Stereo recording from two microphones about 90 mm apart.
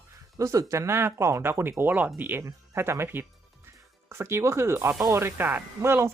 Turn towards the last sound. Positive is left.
turn(degrees=-30)  # may be behind; listen again after turning